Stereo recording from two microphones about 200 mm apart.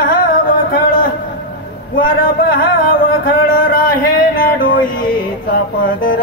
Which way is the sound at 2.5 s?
45° left (ahead or behind).